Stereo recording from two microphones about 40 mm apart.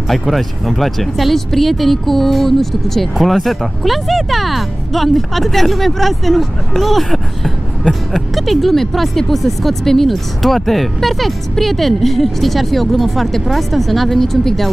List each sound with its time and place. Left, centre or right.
0.1 s speech: centre